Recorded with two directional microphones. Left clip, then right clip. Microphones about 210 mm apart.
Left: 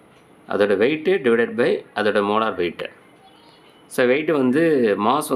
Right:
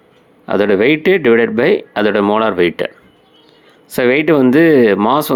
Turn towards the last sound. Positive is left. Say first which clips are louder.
# right 7 dB
turn(degrees=-35)  # may be behind; listen again after turning